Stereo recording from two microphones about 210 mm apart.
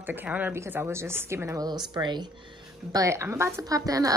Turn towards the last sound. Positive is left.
turn(degrees=-15)  # may be behind; listen again after turning